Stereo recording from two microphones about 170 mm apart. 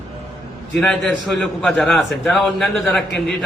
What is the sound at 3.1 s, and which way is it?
Speech, 80° left.